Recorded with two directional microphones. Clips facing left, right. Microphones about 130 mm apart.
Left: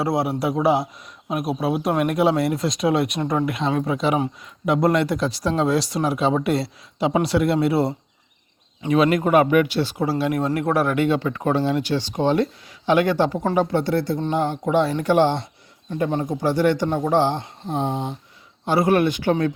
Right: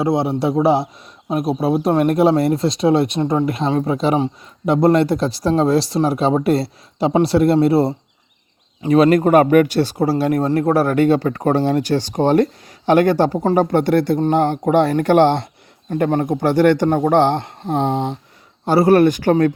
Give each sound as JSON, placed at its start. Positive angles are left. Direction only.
{"t": 0.0, "sound": "a man's voice", "side_deg": -25}
{"t": 18.6, "sound": "speech", "side_deg": -40}